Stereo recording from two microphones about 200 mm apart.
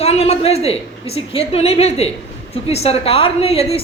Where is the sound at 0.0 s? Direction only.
30° left (ahead or behind).